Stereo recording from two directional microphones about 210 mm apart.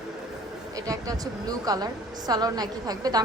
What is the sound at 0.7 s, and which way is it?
A woman's voice, 15° right (ahead or behind).